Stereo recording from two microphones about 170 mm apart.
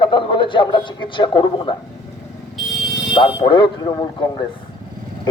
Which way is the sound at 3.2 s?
30° left (ahead or behind).